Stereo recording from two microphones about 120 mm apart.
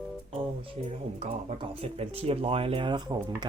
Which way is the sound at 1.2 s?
65° right (ahead or behind).